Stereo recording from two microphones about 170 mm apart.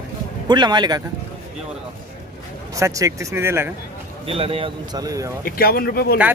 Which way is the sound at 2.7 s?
20° right (ahead or behind).